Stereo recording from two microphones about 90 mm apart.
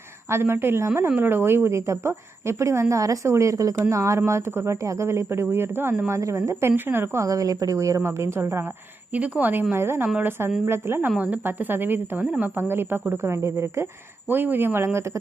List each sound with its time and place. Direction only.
0.3 s a woman's voice: 30° right (ahead or behind)
9.1 s a woman's voice: 15° right (ahead or behind)
12.2 s a woman's voice: 10° right (ahead or behind)
12.5 s a woman's voice: 25° right (ahead or behind)